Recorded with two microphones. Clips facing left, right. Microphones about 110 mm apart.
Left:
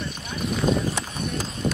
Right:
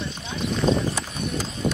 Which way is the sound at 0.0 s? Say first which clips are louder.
Right 1 dB; 25° right (ahead or behind).